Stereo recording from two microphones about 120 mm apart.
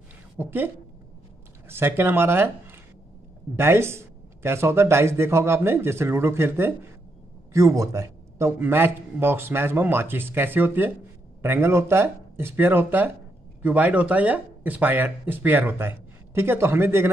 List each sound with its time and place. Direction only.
0.4 s speech: 15° right (ahead or behind)
1.7 s speech: 20° right (ahead or behind)